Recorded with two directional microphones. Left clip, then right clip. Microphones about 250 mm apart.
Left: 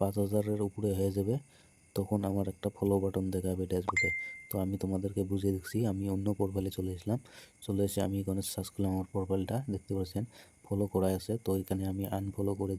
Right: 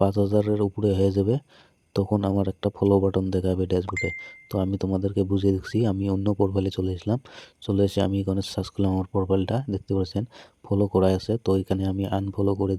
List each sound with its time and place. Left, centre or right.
0.0 s speech: right